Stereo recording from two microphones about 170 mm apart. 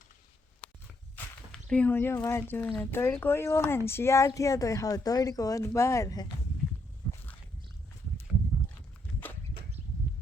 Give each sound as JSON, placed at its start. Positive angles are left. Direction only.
{"t": 1.1, "sound": "speech", "side_deg": 5}